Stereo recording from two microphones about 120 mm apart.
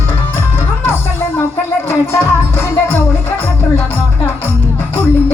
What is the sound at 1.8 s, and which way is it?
Music, 20° left (ahead or behind).